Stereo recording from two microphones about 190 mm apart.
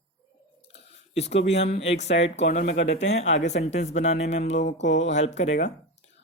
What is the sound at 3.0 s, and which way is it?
Speech, 35° left (ahead or behind).